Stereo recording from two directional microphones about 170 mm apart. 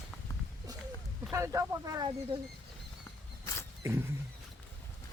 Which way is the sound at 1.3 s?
15° right (ahead or behind).